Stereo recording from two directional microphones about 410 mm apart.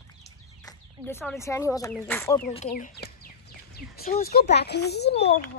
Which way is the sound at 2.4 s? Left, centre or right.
Centre.